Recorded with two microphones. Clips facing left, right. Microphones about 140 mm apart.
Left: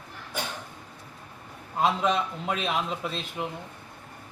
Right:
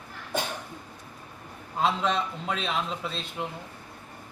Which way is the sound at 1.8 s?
5° left (ahead or behind).